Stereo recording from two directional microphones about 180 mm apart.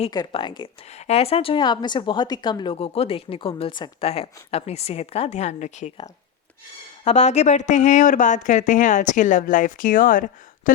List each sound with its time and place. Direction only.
0.1 s a woman's voice: 25° left (ahead or behind); by 5.9 s 40° left (ahead or behind)
7.0 s speech: 40° left (ahead or behind)